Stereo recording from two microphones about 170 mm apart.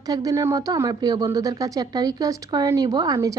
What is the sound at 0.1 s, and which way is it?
Speech, 20° right (ahead or behind).